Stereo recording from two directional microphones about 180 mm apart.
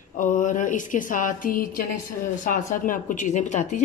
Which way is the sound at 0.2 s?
45° left (ahead or behind).